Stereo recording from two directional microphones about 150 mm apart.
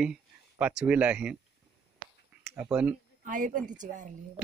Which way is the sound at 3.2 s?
60° right (ahead or behind).